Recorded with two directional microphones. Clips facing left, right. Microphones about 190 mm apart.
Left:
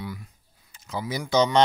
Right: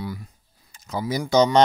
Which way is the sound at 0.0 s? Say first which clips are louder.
Right 3 dB; 35° right (ahead or behind).